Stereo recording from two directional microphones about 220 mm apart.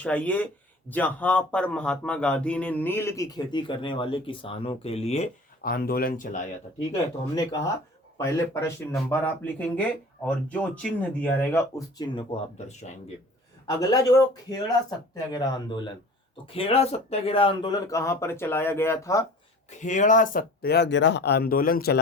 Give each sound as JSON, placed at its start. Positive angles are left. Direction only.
{"t": 0.0, "sound": "speech", "side_deg": 5}
{"t": 7.3, "sound": "speech", "side_deg": 15}
{"t": 12.1, "sound": "speech", "side_deg": 30}
{"t": 13.7, "sound": "speech", "side_deg": 15}
{"t": 19.7, "sound": "speech", "side_deg": 35}